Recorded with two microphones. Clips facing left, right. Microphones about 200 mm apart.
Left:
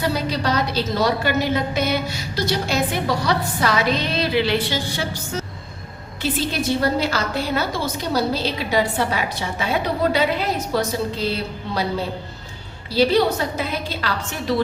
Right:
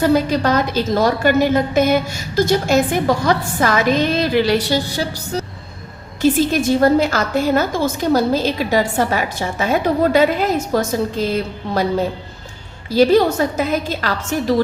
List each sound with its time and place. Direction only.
0.0 s a woman's voice: 50° right (ahead or behind)